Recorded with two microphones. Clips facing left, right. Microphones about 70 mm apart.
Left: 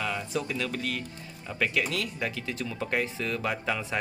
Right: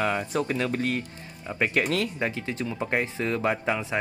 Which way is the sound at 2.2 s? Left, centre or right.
Right.